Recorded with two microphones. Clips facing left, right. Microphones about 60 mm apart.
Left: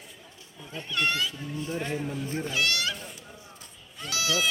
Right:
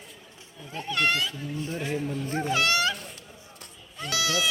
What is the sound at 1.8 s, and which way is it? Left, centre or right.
Speech, centre.